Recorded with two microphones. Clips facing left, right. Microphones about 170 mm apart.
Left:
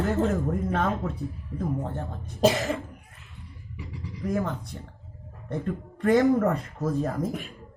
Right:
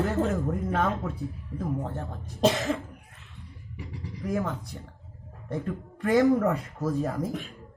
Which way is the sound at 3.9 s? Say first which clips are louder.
Left 1 dB; 50° right (ahead or behind).